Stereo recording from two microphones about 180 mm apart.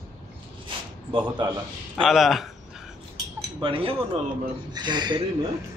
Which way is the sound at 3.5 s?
30° right (ahead or behind).